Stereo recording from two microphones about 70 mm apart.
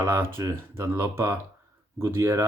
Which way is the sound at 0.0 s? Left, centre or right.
Right.